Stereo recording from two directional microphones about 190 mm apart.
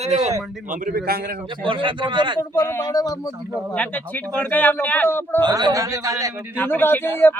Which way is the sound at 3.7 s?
5° left (ahead or behind).